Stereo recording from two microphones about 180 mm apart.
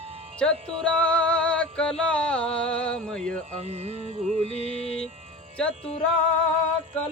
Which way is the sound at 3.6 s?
35° right (ahead or behind).